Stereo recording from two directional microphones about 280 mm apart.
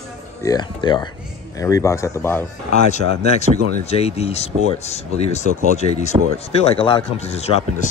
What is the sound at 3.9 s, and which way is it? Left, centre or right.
Speech, left.